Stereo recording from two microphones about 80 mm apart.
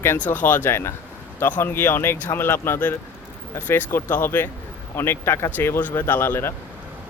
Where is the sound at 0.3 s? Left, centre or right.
Left.